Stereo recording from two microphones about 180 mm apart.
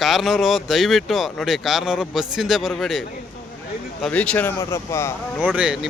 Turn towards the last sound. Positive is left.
turn(degrees=-5)  # may be behind; listen again after turning